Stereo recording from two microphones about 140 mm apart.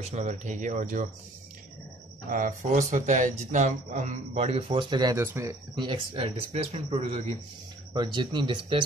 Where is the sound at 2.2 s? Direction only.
70° right (ahead or behind); by 5.1 s 30° right (ahead or behind).